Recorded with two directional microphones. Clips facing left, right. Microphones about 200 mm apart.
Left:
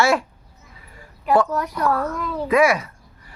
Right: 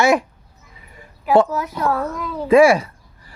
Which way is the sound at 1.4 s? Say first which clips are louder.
Even; 5° right (ahead or behind).